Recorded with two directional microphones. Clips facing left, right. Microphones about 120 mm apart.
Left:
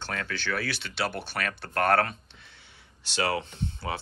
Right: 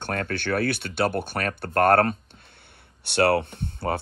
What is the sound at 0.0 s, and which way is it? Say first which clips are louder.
Speech: right 5 dB; 50° right (ahead or behind).